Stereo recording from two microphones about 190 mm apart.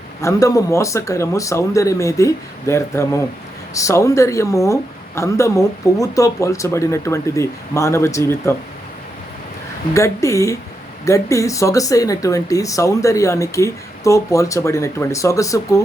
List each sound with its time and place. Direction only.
0.2 s a woman's voice: 15° left (ahead or behind)
9.9 s a woman's voice: 15° left (ahead or behind)